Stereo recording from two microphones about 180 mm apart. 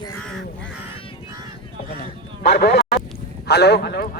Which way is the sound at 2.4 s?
65° left (ahead or behind).